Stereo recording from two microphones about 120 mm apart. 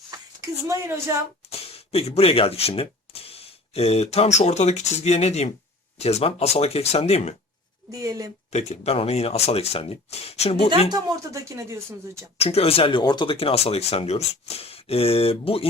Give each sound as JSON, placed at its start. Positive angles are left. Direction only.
{"t": 0.7, "sound": "speech", "side_deg": -20}
{"t": 1.5, "sound": "speech", "side_deg": 55}
{"t": 7.9, "sound": "speech", "side_deg": -30}
{"t": 8.5, "sound": "speech", "side_deg": 60}
{"t": 10.9, "sound": "speech", "side_deg": -25}
{"t": 12.4, "sound": "speech", "side_deg": 55}